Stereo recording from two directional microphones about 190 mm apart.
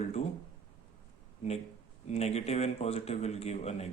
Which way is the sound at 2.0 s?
35° left (ahead or behind).